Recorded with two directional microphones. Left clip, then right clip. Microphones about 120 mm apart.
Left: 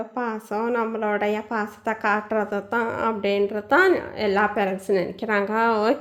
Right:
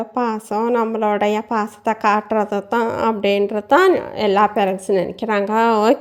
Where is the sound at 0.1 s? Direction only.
55° right (ahead or behind).